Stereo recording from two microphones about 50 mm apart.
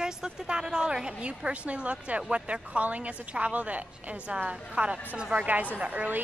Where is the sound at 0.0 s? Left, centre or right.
Centre.